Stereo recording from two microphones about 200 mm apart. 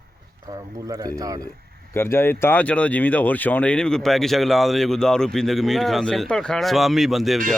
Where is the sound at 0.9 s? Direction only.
20° right (ahead or behind).